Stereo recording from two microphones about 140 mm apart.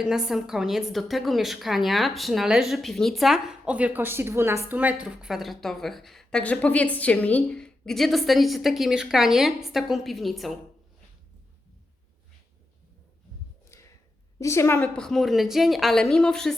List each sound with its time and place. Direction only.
0.0 s a woman's voice: 5° right (ahead or behind)
14.3 s a woman's voice: 20° left (ahead or behind)
14.9 s a woman's voice: 5° left (ahead or behind)